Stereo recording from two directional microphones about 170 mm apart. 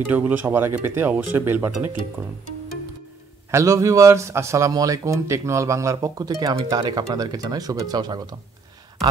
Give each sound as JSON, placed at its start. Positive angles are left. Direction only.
{"t": 0.1, "sound": "speech", "side_deg": -10}
{"t": 3.5, "sound": "a man's voice", "side_deg": -15}